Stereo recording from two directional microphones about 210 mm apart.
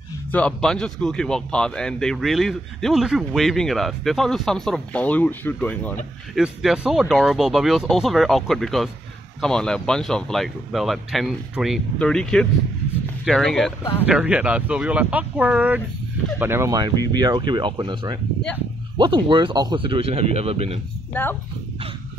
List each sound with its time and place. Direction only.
0.3 s speech: 5° left (ahead or behind); by 20.8 s 30° right (ahead or behind)
21.1 s speech: 10° left (ahead or behind)